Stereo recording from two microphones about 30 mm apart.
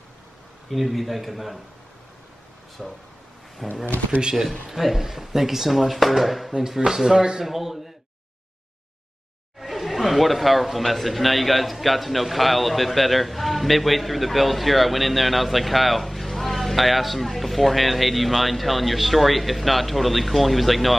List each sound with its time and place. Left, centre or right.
0.7 s a man's voice: centre
2.8 s a man's voice: centre
4.2 s speech: right
4.6 s a man's voice: centre
6.9 s speech: centre
7.4 s speech: centre
9.6 s chatter: centre
10.8 s a man's voice: centre